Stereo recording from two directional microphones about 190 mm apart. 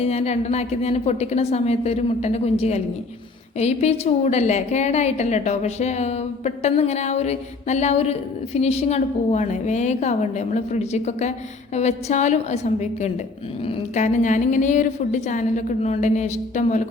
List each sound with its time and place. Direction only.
0.0 s a woman's voice: 35° left (ahead or behind)